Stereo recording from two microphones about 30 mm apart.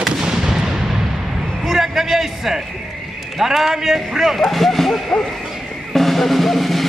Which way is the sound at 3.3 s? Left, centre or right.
Centre.